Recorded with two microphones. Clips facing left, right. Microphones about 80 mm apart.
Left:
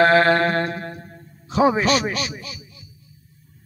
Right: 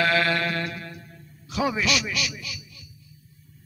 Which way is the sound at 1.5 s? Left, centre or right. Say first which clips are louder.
Left 7 dB; left.